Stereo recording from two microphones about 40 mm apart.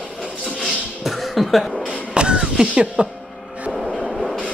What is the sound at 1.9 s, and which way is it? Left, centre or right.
Music, right.